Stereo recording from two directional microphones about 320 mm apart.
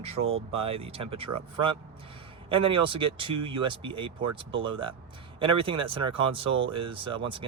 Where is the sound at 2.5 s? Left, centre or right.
Centre.